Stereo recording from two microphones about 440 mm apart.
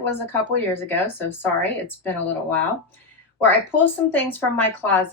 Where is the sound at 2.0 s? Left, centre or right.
Centre.